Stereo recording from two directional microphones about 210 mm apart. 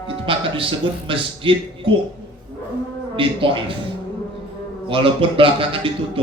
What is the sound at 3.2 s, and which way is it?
Speech, 25° right (ahead or behind).